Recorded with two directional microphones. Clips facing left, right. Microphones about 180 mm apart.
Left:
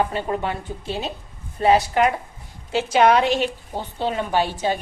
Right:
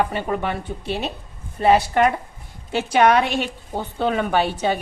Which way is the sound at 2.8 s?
60° right (ahead or behind).